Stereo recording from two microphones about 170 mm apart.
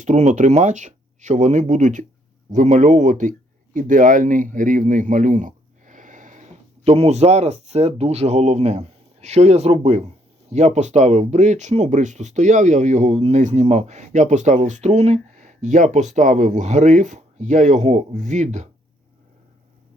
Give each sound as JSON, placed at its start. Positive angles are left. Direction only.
{"t": 0.0, "sound": "speech", "side_deg": -45}
{"t": 6.8, "sound": "speech", "side_deg": -40}